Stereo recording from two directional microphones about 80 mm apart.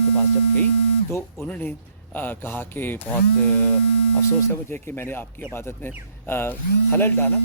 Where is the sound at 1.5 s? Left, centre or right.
Centre.